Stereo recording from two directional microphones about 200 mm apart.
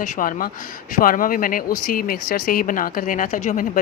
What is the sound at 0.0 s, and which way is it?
Speech, 40° left (ahead or behind).